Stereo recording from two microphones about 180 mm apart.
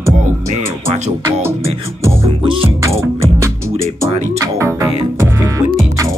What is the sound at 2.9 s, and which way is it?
Music, 15° right (ahead or behind).